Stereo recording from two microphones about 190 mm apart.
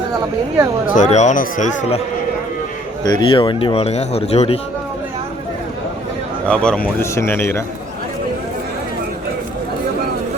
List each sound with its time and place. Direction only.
0.9 s a man's voice: 40° left (ahead or behind)
3.0 s a man's voice: 20° left (ahead or behind)
6.5 s a man's voice: 5° left (ahead or behind)